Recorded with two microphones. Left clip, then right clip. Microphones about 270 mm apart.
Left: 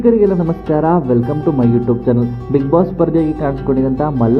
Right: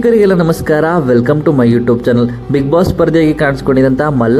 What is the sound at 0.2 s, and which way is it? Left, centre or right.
Speech, right.